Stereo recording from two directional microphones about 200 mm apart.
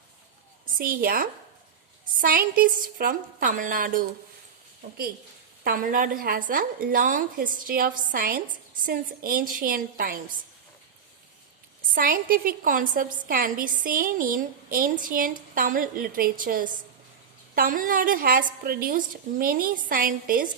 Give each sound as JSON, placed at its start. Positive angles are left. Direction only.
{"t": 0.6, "sound": "a woman's voice", "side_deg": -45}
{"t": 5.6, "sound": "a woman's voice", "side_deg": -45}
{"t": 11.9, "sound": "a woman's voice", "side_deg": -45}